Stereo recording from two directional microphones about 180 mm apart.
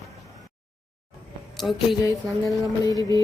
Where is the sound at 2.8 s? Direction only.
20° left (ahead or behind).